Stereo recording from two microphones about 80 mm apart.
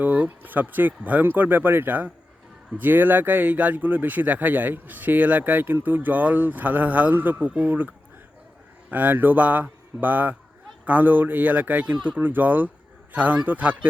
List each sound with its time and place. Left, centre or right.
0.0 s speech: right
8.9 s speech: right